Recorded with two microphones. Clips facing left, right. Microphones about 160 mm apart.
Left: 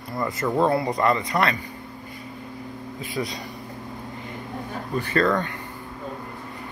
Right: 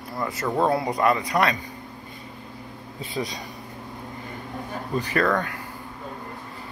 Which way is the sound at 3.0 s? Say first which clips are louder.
Even; 20° right (ahead or behind).